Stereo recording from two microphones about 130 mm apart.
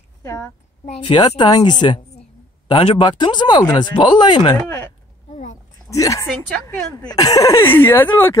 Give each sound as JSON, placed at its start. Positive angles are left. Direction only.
{"t": 0.2, "sound": "speech", "side_deg": 20}
{"t": 0.8, "sound": "speech", "side_deg": 45}
{"t": 5.9, "sound": "speech", "side_deg": 25}